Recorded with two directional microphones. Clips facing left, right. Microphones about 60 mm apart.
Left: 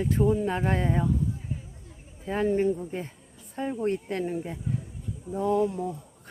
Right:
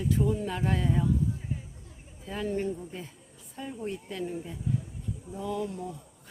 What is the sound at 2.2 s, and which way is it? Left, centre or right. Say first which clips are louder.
Speech: left 7 dB; left.